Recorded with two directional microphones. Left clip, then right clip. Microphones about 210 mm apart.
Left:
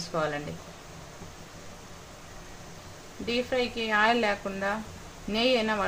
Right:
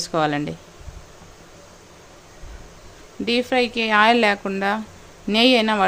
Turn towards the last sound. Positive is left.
turn(degrees=-50)  # may be behind; listen again after turning